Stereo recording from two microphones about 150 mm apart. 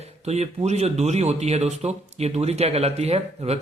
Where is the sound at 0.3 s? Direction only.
45° right (ahead or behind).